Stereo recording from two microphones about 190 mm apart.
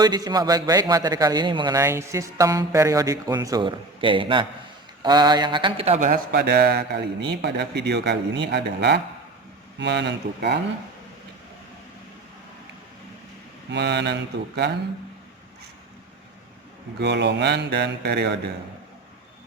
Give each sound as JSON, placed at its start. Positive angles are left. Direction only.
{"t": 0.0, "sound": "a man's voice", "side_deg": -20}
{"t": 6.1, "sound": "a man's voice", "side_deg": -55}
{"t": 13.7, "sound": "a man's voice", "side_deg": -65}
{"t": 17.0, "sound": "a man's voice", "side_deg": -65}